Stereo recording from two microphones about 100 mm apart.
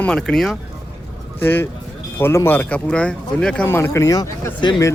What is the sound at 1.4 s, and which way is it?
Speech, 20° left (ahead or behind).